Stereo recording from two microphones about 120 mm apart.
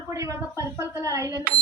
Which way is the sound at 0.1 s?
25° right (ahead or behind).